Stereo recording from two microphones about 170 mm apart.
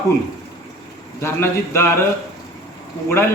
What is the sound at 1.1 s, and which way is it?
Speech, 15° left (ahead or behind).